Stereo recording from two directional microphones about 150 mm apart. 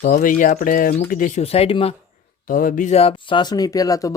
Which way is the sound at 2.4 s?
65° left (ahead or behind).